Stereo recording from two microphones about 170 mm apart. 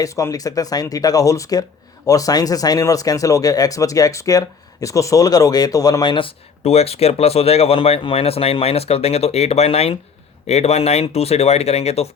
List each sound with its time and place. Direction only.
0.0 s speech: 20° left (ahead or behind); by 12.0 s 40° left (ahead or behind)